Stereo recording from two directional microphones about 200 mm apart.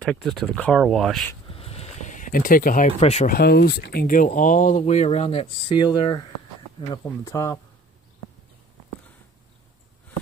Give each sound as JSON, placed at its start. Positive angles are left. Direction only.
{"t": 0.0, "sound": "speech", "side_deg": 0}
{"t": 1.5, "sound": "a sound", "side_deg": 30}
{"t": 3.3, "sound": "speech", "side_deg": 50}